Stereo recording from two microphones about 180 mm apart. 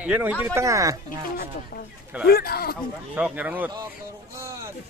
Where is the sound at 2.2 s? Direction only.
60° left (ahead or behind).